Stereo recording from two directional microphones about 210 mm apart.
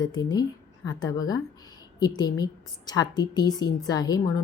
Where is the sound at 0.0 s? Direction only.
20° left (ahead or behind).